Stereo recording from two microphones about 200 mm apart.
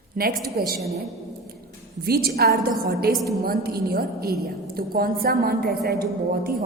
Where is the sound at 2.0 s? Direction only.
50° right (ahead or behind).